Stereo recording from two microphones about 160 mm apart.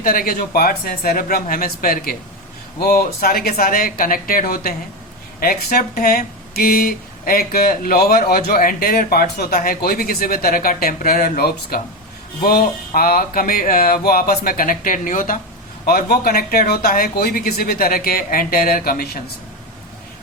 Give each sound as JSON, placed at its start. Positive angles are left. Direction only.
{"t": 0.0, "sound": "music", "side_deg": 65}
{"t": 5.4, "sound": "speech", "side_deg": 65}
{"t": 12.4, "sound": "music", "side_deg": 65}
{"t": 15.9, "sound": "speech", "side_deg": 65}